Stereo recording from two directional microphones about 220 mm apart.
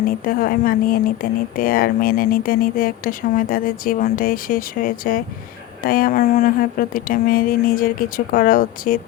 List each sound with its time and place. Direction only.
0.3 s speech: 40° left (ahead or behind)